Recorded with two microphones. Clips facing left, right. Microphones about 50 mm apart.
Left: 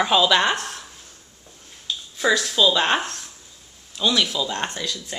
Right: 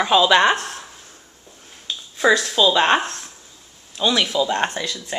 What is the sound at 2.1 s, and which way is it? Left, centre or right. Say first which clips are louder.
Speech: right 3 dB; centre.